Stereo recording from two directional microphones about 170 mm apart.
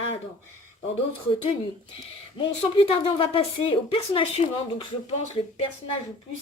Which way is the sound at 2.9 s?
30° left (ahead or behind).